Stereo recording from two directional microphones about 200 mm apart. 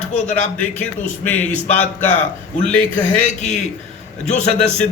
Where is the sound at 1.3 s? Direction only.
10° left (ahead or behind).